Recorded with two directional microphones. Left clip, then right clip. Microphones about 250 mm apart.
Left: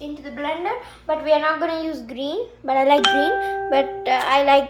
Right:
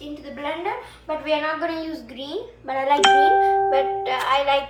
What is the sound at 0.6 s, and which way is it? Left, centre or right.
A woman's voice, left.